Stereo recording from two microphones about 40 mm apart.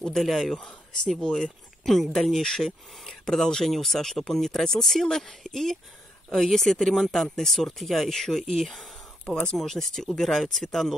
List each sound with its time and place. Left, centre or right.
0.2 s speech: centre
1.9 s speech: centre
9.2 s speech: left
9.6 s speech: centre